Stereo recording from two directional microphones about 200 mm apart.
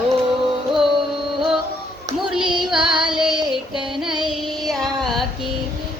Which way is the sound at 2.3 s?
5° right (ahead or behind).